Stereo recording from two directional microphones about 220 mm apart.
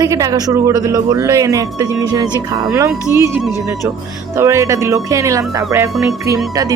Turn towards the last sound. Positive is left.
turn(degrees=-10)  # may be behind; listen again after turning